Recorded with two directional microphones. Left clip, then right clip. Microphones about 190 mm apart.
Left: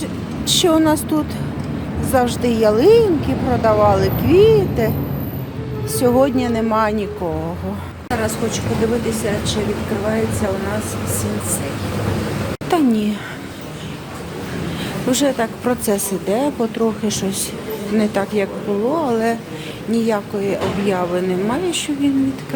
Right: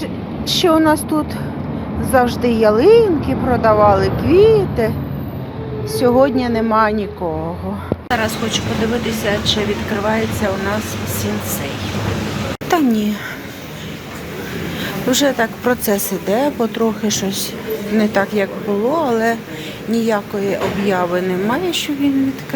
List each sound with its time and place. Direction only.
0.4 s a woman's voice: 5° left (ahead or behind)
12.7 s a woman's voice: 15° left (ahead or behind)
15.1 s a woman's voice: 10° left (ahead or behind)